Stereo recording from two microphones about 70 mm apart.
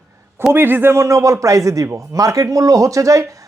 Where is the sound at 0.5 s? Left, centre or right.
Right.